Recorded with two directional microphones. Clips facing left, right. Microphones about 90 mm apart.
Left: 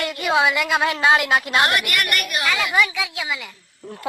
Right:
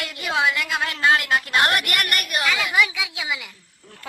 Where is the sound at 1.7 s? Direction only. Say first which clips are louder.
Left 1 dB; 45° right (ahead or behind).